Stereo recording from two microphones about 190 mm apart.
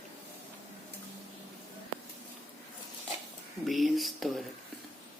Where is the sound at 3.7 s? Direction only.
Centre (ahead or behind).